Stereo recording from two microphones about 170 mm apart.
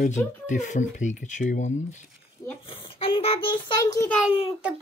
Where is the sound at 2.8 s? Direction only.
30° left (ahead or behind).